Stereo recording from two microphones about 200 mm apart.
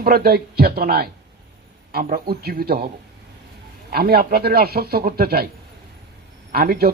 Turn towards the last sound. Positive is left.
turn(degrees=-50)  # may be behind; listen again after turning